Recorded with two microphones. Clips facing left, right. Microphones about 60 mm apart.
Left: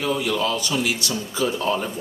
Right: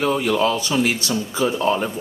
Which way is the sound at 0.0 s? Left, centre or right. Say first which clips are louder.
Right 4 dB; right.